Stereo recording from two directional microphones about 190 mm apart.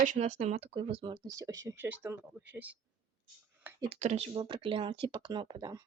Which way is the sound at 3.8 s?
35° right (ahead or behind).